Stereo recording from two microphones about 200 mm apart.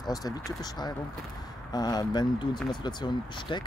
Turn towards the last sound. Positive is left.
turn(degrees=25)  # may be behind; listen again after turning